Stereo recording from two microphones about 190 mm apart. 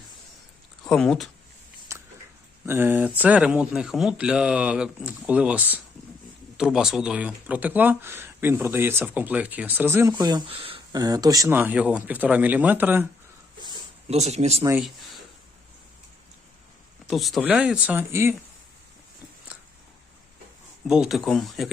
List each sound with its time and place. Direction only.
0.9 s speech: 5° left (ahead or behind)
1.9 s biting: 15° right (ahead or behind)
2.6 s speech: 10° right (ahead or behind)
13.6 s a sound: 25° right (ahead or behind)
14.2 s speech: 35° right (ahead or behind)
14.6 s speech: 15° right (ahead or behind)
17.1 s speech: centre (ahead or behind)
20.8 s speech: 5° right (ahead or behind)